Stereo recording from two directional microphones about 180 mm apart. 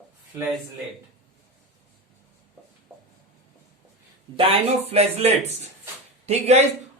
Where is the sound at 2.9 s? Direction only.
15° right (ahead or behind).